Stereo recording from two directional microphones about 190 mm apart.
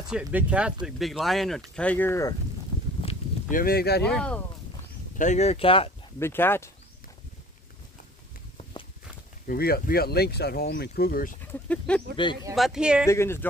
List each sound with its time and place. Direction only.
0.1 s speech: 5° right (ahead or behind); by 2.3 s 15° left (ahead or behind)
3.4 s speech: 50° left (ahead or behind)
4.1 s speech: 5° left (ahead or behind)
5.1 s speech: 40° left (ahead or behind)
6.1 s speech: 10° left (ahead or behind)
9.5 s speech: 50° left (ahead or behind)
11.7 s speech: 5° left (ahead or behind)
13.0 s speech: 15° left (ahead or behind)